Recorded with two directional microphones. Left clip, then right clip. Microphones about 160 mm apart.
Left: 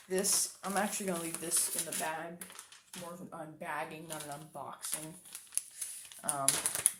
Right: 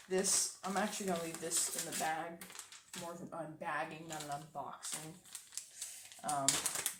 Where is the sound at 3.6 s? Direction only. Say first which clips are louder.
Left 1 dB; 35° left (ahead or behind).